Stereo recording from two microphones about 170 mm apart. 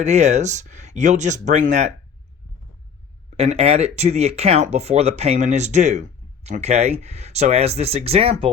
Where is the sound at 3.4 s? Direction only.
35° right (ahead or behind).